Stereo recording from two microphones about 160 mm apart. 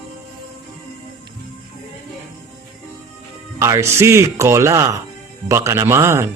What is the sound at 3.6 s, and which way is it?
Speech, 15° right (ahead or behind).